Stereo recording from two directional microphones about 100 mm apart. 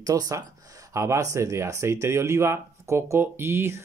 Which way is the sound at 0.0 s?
35° right (ahead or behind).